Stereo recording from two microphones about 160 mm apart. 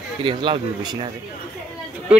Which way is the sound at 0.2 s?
30° right (ahead or behind).